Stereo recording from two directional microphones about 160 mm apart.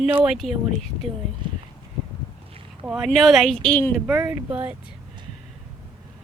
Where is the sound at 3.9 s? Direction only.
5° right (ahead or behind).